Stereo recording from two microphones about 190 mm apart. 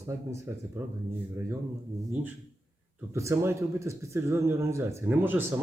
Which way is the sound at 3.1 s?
15° right (ahead or behind).